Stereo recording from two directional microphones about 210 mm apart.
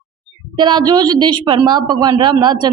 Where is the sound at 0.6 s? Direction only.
20° right (ahead or behind).